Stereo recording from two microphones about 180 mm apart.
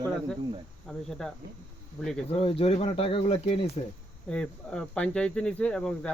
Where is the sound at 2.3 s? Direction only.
30° left (ahead or behind).